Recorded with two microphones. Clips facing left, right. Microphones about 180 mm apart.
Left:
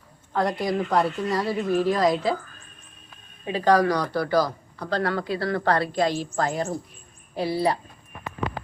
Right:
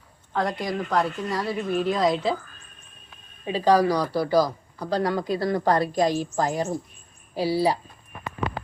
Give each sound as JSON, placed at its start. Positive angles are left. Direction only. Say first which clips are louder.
{"t": 0.3, "sound": "a woman's voice", "louder": "left 2 dB", "side_deg": 5}
{"t": 3.6, "sound": "speech", "louder": "even", "side_deg": -10}
{"t": 6.5, "sound": "a woman's voice", "louder": "right 1 dB", "side_deg": 0}